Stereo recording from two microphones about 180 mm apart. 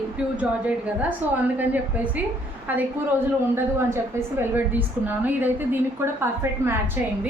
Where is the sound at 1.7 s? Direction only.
10° right (ahead or behind).